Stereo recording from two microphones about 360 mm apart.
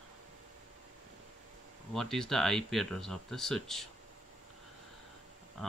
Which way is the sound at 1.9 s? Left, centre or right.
Centre.